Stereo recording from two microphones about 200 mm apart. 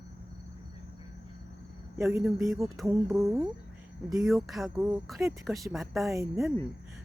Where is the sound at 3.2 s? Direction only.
15° right (ahead or behind).